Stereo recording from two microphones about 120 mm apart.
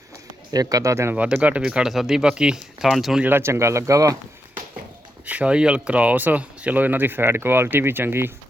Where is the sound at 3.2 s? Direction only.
20° right (ahead or behind).